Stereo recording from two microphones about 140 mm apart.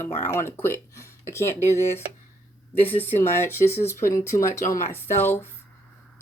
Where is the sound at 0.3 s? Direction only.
15° left (ahead or behind).